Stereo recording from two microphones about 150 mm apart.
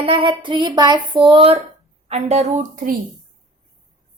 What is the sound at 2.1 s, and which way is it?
Speech, 45° right (ahead or behind).